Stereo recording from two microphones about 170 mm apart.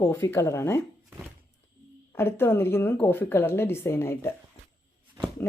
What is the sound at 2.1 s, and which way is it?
Speech, 15° left (ahead or behind).